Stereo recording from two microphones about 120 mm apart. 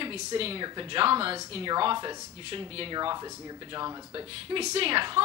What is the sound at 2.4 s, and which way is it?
Speech, 50° right (ahead or behind).